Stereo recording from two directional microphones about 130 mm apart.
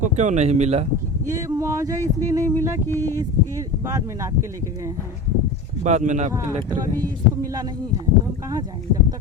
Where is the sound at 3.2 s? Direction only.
30° right (ahead or behind).